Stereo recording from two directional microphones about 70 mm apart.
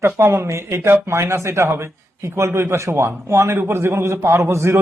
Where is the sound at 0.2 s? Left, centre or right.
Right.